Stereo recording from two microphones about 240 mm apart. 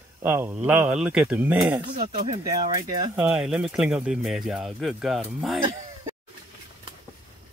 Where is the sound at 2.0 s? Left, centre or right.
Right.